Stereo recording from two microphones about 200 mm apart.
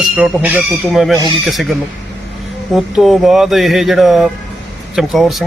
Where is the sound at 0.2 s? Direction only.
5° right (ahead or behind).